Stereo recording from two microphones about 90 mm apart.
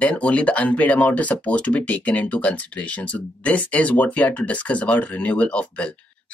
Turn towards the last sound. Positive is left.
turn(degrees=15)  # may be behind; listen again after turning